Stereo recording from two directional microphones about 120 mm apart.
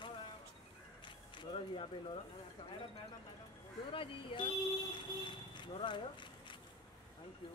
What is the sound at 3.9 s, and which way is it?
Speech, 45° left (ahead or behind).